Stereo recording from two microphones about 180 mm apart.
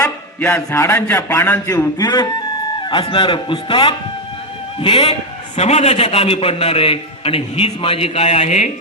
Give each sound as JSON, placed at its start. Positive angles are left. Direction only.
{"t": 0.0, "sound": "a man's voice", "side_deg": 15}